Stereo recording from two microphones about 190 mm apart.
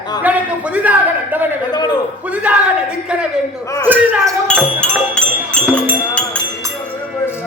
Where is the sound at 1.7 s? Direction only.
20° left (ahead or behind).